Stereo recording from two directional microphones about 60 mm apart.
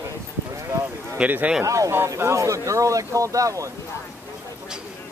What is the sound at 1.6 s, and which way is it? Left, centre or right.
Speech, right.